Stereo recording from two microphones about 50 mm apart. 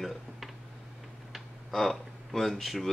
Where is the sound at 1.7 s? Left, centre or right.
Centre.